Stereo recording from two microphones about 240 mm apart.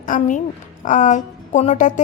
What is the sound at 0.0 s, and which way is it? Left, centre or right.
A woman's voice, left.